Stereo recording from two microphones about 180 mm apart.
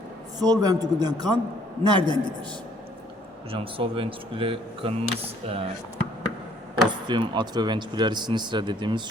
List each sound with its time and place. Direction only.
0.3 s speech: 20° right (ahead or behind)
3.5 s speech: 30° right (ahead or behind)
6.8 s speech: 25° right (ahead or behind)